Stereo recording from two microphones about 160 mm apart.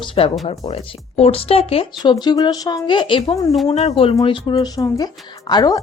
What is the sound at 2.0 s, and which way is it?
A woman's voice, 25° left (ahead or behind).